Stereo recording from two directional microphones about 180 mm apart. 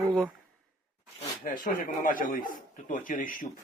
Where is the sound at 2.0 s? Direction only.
50° left (ahead or behind).